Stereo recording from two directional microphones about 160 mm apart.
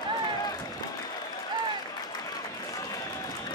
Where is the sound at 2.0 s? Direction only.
25° left (ahead or behind).